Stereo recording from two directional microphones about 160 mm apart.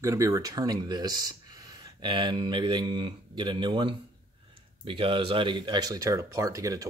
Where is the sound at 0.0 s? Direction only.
20° right (ahead or behind).